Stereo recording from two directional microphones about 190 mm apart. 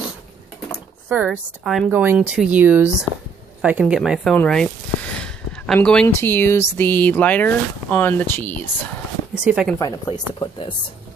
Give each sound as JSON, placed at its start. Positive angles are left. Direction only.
{"t": 1.0, "sound": "a woman's voice", "side_deg": -5}
{"t": 9.3, "sound": "speech", "side_deg": -5}
{"t": 9.8, "sound": "speech", "side_deg": 20}